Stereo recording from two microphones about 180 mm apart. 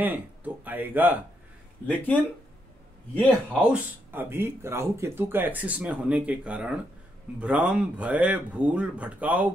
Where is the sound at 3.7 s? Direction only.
10° right (ahead or behind).